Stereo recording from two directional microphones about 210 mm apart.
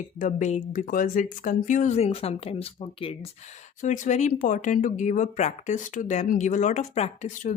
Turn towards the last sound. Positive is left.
turn(degrees=35)  # may be behind; listen again after turning